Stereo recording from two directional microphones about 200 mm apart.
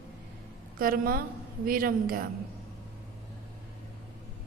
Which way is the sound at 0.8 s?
45° right (ahead or behind).